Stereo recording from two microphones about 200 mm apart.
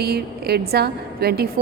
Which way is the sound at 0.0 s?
50° right (ahead or behind).